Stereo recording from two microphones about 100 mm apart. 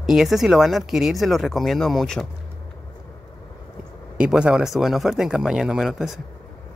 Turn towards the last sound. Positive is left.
turn(degrees=-5)  # may be behind; listen again after turning